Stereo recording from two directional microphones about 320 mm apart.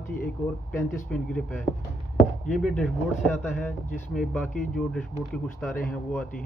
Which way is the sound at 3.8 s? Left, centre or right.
Left.